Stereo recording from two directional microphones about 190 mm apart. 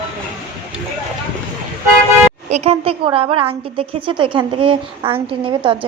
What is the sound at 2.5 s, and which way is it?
A woman's voice, 35° right (ahead or behind).